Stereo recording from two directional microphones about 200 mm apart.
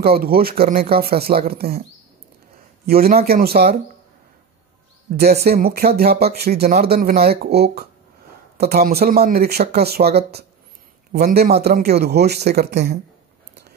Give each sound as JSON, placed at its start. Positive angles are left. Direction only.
{"t": 0.0, "sound": "speech", "side_deg": -50}
{"t": 2.9, "sound": "speech", "side_deg": -50}
{"t": 5.1, "sound": "speech", "side_deg": -50}